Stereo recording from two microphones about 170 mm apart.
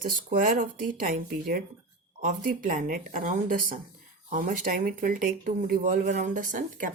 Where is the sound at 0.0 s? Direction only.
55° right (ahead or behind).